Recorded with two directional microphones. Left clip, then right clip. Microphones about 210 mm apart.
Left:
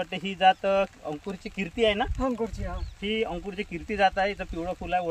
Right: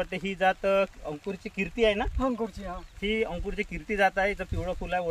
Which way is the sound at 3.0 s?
20° right (ahead or behind).